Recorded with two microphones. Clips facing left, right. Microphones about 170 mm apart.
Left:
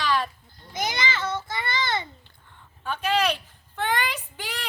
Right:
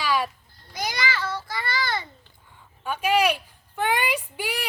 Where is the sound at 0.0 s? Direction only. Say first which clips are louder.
Right 1 dB; 10° right (ahead or behind).